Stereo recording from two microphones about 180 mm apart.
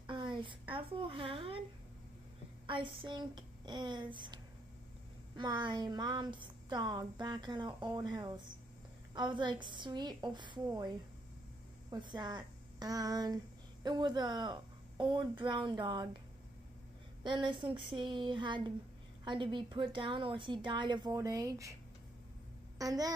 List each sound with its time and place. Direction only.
0.0 s a sound: 25° right (ahead or behind)
2.6 s speech: 25° right (ahead or behind)
11.9 s a woman's voice: 25° right (ahead or behind)
17.2 s speech: 25° right (ahead or behind)
22.8 s speech: 20° right (ahead or behind)